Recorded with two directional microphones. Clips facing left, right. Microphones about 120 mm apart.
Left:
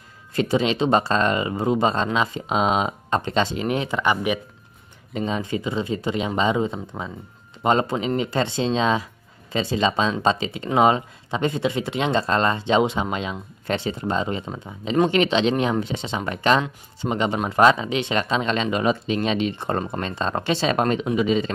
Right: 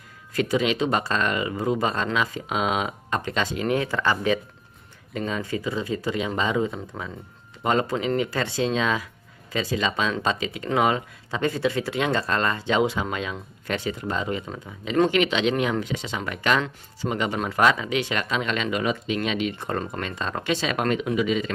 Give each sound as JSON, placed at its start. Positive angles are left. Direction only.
{"t": 0.3, "sound": "speech", "side_deg": 25}